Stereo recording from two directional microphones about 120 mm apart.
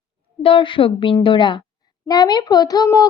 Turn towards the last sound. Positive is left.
turn(degrees=30)  # may be behind; listen again after turning